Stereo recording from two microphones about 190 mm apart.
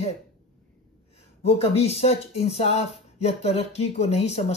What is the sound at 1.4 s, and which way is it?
Speech, 30° left (ahead or behind).